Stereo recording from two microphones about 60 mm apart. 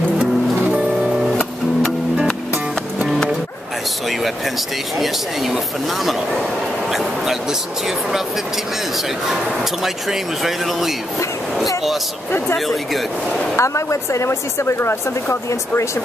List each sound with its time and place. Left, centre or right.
0.2 s music: centre
4.9 s speech: centre
6.9 s a sound: centre
10.0 s speech: centre
12.5 s speech: centre
13.6 s speech: left